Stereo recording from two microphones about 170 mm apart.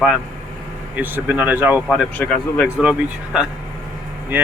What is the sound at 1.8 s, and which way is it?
Speech, 5° left (ahead or behind).